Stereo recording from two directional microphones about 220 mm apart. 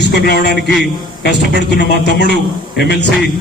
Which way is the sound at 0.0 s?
50° left (ahead or behind).